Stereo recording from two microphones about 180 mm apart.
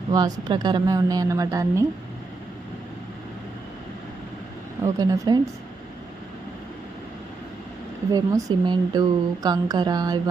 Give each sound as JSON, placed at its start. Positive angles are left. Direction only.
{"t": 0.1, "sound": "speech", "side_deg": -20}
{"t": 4.9, "sound": "speech", "side_deg": -20}
{"t": 8.1, "sound": "speech", "side_deg": -20}